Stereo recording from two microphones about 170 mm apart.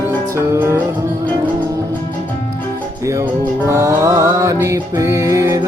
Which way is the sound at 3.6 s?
20° right (ahead or behind).